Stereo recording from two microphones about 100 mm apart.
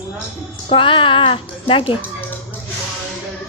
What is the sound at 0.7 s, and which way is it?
Speech, 60° left (ahead or behind).